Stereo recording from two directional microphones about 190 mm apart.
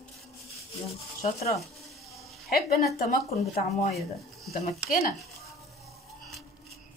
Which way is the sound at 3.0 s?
45° left (ahead or behind).